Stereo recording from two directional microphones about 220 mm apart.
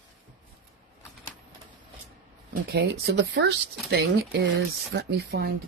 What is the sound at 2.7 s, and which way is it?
Speech, 50° right (ahead or behind).